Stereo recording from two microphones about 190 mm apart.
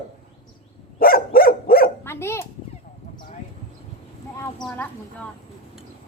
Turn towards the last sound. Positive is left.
turn(degrees=10)  # may be behind; listen again after turning